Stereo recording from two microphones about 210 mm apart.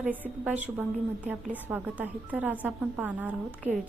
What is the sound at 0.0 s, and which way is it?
A woman's voice, 10° right (ahead or behind).